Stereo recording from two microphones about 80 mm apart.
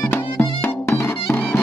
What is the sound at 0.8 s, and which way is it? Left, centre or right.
Music, left.